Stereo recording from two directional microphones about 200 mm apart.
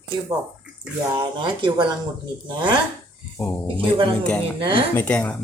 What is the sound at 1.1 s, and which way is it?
Speech, 25° right (ahead or behind).